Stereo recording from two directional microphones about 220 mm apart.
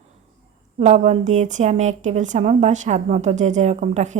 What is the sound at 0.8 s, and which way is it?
A woman's voice, 30° right (ahead or behind).